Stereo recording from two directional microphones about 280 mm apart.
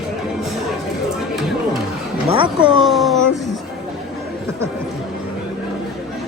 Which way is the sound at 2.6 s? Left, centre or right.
Centre.